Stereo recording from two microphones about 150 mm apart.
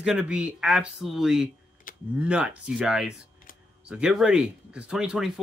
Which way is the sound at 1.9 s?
65° left (ahead or behind).